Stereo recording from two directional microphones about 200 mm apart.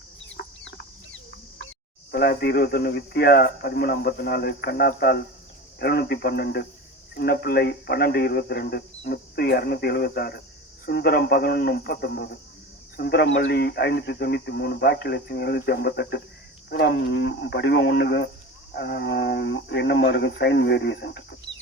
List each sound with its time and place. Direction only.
0.3 s chicken: 70° left (ahead or behind)
2.1 s a man's voice: 50° left (ahead or behind)